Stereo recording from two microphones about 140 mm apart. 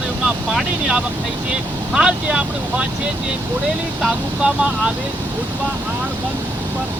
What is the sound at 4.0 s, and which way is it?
Speech, 5° right (ahead or behind).